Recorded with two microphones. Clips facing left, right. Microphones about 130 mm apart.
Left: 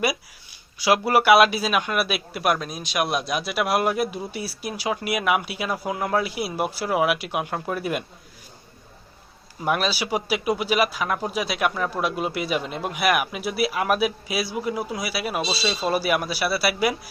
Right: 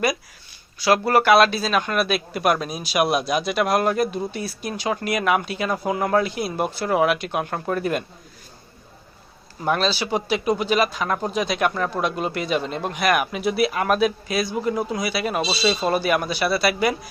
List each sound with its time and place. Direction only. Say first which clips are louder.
0.8 s speech: right 1 dB; 15° left (ahead or behind)
9.6 s speech: right 2 dB; 10° left (ahead or behind)